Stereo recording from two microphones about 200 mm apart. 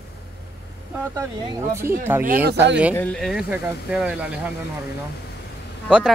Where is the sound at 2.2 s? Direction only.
50° right (ahead or behind).